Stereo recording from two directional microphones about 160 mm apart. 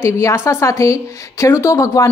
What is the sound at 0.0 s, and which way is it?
Speech, 15° left (ahead or behind).